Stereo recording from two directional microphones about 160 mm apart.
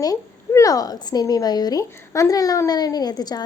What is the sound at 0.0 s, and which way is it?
A woman's voice, 20° left (ahead or behind).